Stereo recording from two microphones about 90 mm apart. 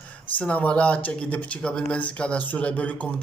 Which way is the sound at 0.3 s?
20° left (ahead or behind).